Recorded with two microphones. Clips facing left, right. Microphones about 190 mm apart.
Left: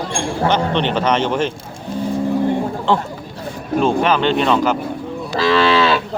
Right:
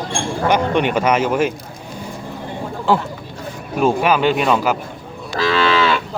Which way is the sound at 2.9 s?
5° right (ahead or behind).